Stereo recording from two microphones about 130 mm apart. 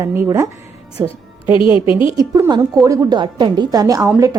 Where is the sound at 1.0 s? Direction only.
10° right (ahead or behind).